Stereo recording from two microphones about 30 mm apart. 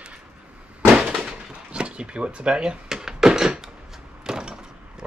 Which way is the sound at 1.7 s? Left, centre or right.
Right.